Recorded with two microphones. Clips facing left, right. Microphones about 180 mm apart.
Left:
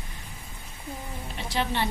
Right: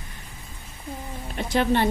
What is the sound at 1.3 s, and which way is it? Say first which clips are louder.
Speech: right 7 dB; 50° right (ahead or behind).